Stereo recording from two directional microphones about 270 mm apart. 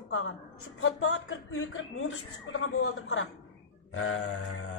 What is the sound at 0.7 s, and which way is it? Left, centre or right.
Speech, left.